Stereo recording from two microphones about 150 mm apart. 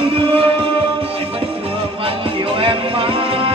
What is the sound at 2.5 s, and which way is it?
Music, 35° right (ahead or behind).